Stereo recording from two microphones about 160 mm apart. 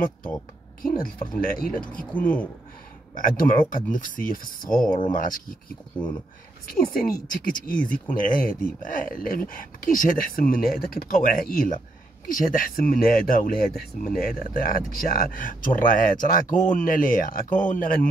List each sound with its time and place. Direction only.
0.8 s speech: 60° left (ahead or behind)
1.6 s speech: 10° left (ahead or behind)
3.2 s speech: 60° left (ahead or behind)
4.8 s speech: 30° left (ahead or behind)
5.1 s speech: 60° left (ahead or behind)
7.0 s speech: 60° left (ahead or behind)